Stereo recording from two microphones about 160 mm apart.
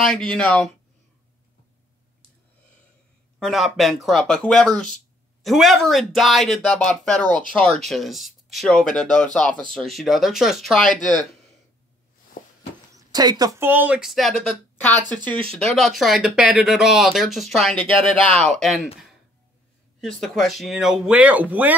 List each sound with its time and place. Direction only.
0.0 s speech: 5° left (ahead or behind)
3.3 s speech: centre (ahead or behind)
12.4 s a sound: 60° left (ahead or behind)
12.9 s speech: 25° right (ahead or behind); by 14.3 s centre (ahead or behind)
14.8 s speech: 10° left (ahead or behind)
20.0 s speech: centre (ahead or behind)